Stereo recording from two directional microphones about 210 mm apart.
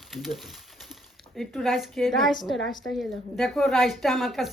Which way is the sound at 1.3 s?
Centre (ahead or behind).